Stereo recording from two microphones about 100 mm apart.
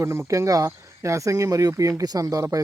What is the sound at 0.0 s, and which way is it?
Speech, 30° right (ahead or behind).